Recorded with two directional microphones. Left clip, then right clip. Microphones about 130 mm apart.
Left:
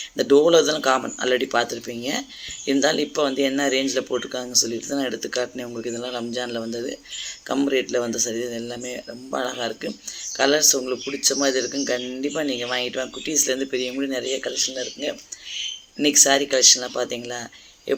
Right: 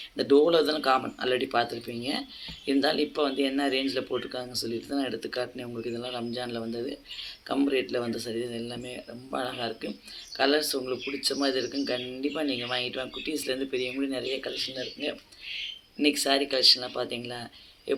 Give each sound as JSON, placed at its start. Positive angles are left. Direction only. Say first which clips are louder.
{"t": 0.2, "sound": "a man's voice", "louder": "left 6 dB", "side_deg": 40}